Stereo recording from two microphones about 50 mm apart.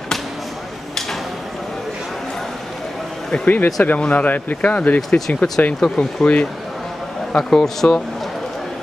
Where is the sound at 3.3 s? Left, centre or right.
Left.